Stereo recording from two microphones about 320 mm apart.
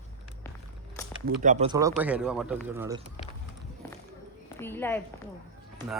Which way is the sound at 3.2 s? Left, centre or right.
Centre.